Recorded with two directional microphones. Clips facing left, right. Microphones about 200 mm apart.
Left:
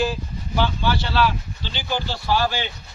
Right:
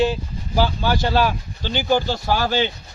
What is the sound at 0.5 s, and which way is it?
Speech, 40° right (ahead or behind).